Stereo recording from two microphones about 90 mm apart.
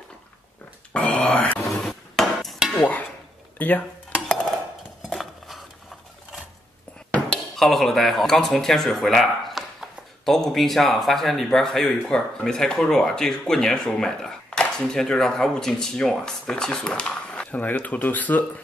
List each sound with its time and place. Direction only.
0.9 s dog: 15° left (ahead or behind)
1.8 s hammer: centre (ahead or behind)
2.8 s dishes: 15° left (ahead or behind)
5.1 s cutlery: centre (ahead or behind)
7.2 s speech: 5° left (ahead or behind); by 18.4 s 20° left (ahead or behind)